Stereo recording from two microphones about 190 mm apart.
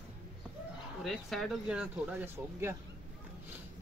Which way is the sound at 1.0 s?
Centre (ahead or behind).